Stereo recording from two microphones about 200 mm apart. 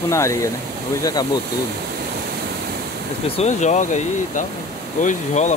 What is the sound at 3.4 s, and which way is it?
Speech, 35° left (ahead or behind).